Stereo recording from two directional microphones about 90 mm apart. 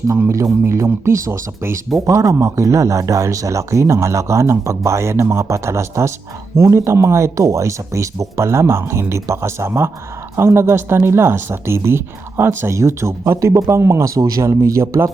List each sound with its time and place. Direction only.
0.6 s speech: 30° right (ahead or behind)